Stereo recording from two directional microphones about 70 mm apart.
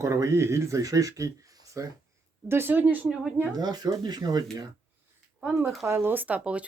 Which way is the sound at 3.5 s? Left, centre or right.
Right.